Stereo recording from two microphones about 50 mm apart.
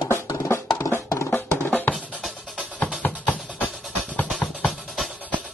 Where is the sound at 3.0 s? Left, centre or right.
Left.